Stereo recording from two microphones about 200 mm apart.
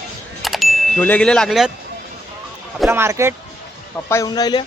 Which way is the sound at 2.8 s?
10° right (ahead or behind).